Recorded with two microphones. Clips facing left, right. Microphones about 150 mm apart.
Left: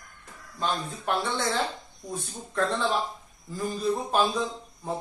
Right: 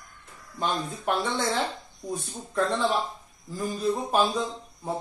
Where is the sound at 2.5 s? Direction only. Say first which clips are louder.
Right 1 dB; 10° right (ahead or behind).